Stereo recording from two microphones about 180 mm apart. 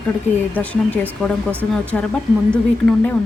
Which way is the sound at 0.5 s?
10° left (ahead or behind).